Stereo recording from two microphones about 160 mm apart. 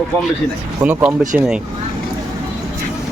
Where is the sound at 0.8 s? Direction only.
10° right (ahead or behind).